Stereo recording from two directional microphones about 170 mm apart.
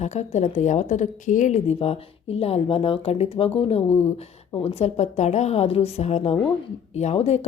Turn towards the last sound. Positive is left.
turn(degrees=40)  # may be behind; listen again after turning